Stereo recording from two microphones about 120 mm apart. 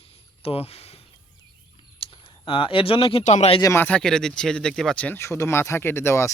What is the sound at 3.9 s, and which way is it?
Speech, 5° left (ahead or behind).